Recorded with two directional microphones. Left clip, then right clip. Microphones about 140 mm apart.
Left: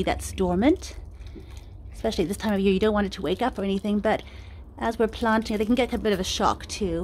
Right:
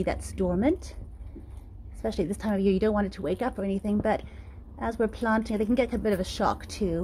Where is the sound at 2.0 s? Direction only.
15° left (ahead or behind).